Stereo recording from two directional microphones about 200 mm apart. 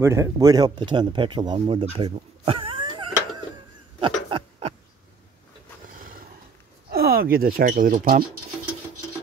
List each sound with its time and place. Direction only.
0.0 s speech: 15° right (ahead or behind)
4.3 s a sound: 30° right (ahead or behind)
5.9 s roar: 45° right (ahead or behind)
6.9 s speech: 50° right (ahead or behind)